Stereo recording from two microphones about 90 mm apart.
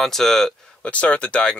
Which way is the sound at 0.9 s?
15° left (ahead or behind).